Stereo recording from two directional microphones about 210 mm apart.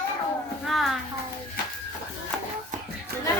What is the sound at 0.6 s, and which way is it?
Music, centre (ahead or behind).